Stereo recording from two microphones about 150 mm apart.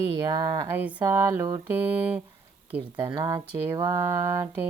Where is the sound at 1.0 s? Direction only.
20° right (ahead or behind).